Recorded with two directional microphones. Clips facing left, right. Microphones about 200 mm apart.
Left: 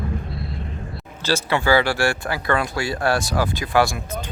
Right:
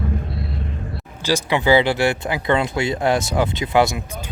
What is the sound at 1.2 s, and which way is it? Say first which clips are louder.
Speech: right 2 dB; 15° right (ahead or behind).